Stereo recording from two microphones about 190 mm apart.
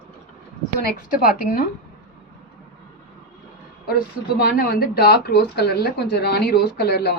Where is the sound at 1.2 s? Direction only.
50° left (ahead or behind).